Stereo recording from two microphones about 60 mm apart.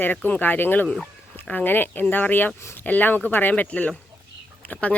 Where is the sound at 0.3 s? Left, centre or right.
Left.